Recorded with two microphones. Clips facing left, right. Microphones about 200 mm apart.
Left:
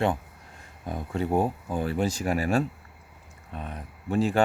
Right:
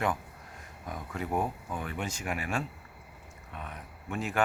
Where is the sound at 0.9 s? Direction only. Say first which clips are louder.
Left 7 dB; 30° left (ahead or behind).